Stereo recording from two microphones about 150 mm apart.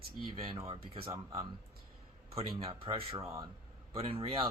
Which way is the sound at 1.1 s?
20° right (ahead or behind).